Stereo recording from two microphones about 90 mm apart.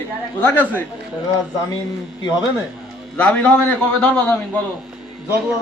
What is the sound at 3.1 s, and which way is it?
A man's voice, 15° left (ahead or behind).